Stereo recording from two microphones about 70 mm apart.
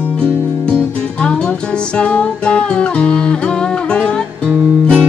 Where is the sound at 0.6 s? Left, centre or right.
Centre.